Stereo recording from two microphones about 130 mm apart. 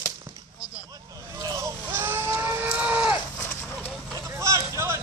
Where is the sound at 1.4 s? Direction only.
30° right (ahead or behind).